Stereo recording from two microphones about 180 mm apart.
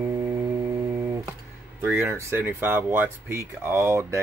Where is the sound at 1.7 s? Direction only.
15° right (ahead or behind).